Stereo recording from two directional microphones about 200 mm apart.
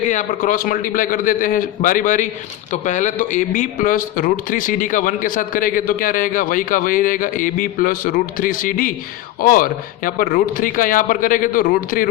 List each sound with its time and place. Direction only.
0.0 s a man's voice: 40° left (ahead or behind)